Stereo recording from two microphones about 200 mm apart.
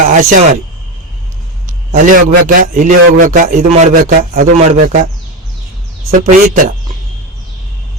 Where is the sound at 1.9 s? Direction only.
40° right (ahead or behind).